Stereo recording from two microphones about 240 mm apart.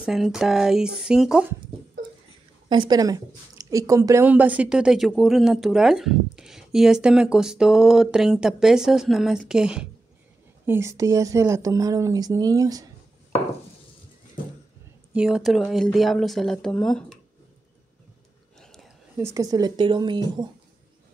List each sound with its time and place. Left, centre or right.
0.0 s a woman's voice: centre
2.7 s a woman's voice: centre
15.1 s a woman's voice: centre
18.6 s a sound: centre
19.1 s speech: centre